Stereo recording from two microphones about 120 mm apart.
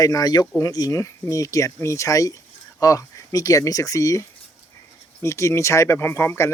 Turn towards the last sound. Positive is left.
turn(degrees=20)  # may be behind; listen again after turning